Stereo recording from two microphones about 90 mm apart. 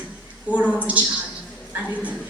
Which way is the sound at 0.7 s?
15° right (ahead or behind).